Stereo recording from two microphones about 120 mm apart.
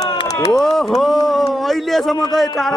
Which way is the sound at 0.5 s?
Centre (ahead or behind).